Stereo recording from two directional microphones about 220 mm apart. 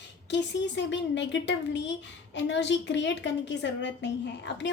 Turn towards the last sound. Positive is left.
turn(degrees=55)  # may be behind; listen again after turning